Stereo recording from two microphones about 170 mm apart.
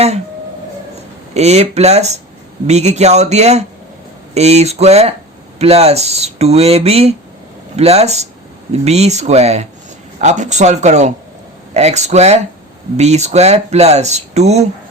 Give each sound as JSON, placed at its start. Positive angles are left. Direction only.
{"t": 1.3, "sound": "speech", "side_deg": -40}